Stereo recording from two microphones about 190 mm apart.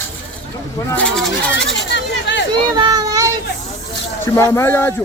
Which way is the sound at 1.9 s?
65° left (ahead or behind).